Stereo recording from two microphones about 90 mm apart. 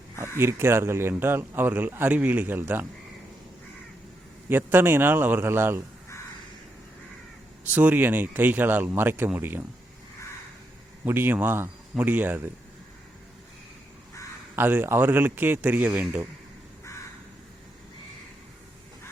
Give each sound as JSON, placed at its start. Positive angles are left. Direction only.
{"t": 0.2, "sound": "speech", "side_deg": -30}
{"t": 4.4, "sound": "speech", "side_deg": -25}
{"t": 7.6, "sound": "speech", "side_deg": -20}
{"t": 11.0, "sound": "speech", "side_deg": -25}
{"t": 14.5, "sound": "speech", "side_deg": -25}